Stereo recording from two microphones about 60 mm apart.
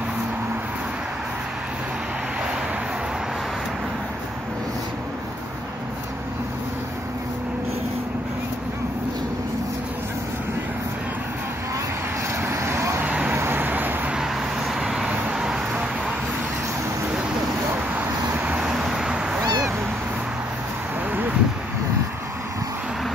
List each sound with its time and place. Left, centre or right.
12.4 s vehicle: right
13.0 s vehicle: right
13.3 s vehicle: right
14.1 s vehicle: centre
17.9 s vehicle: right
18.7 s cat: centre
21.1 s a sound: right